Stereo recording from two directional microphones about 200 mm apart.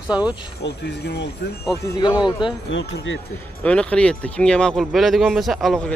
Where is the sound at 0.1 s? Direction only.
5° right (ahead or behind).